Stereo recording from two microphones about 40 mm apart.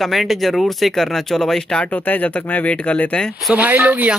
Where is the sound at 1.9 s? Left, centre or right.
Left.